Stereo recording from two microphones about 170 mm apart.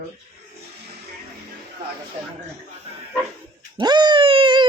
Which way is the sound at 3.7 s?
25° right (ahead or behind).